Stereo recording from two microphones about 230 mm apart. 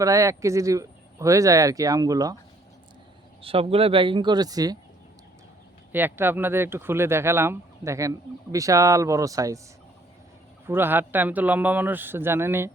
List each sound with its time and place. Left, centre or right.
0.0 s speech: centre
3.4 s speech: right
5.9 s speech: centre
10.7 s speech: centre